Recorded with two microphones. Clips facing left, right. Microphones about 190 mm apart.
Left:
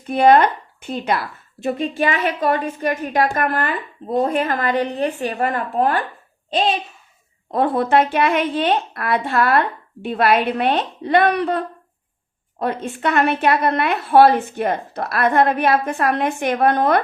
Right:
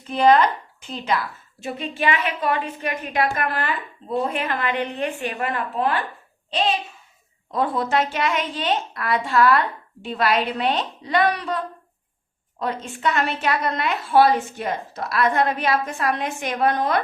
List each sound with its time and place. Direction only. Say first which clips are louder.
0.1 s a woman's voice: left 3 dB; 60° left (ahead or behind)
2.0 s a woman's voice: right 1 dB; 40° left (ahead or behind)
7.5 s a woman's voice: left 5 dB; 55° left (ahead or behind)